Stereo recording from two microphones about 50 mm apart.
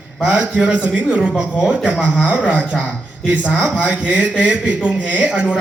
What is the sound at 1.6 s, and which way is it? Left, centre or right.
Speech, centre.